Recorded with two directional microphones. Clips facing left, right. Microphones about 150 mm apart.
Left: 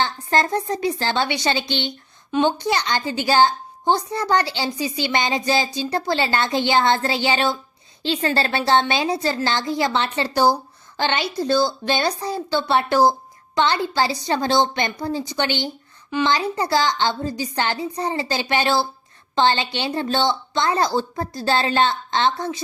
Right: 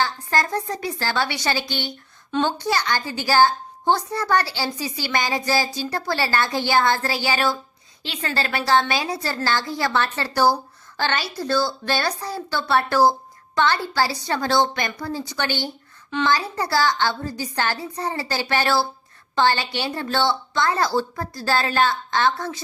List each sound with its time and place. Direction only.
0.0 s a woman's voice: 25° left (ahead or behind)